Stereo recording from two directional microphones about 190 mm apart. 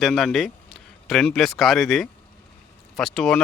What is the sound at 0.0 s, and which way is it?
Speech, centre (ahead or behind).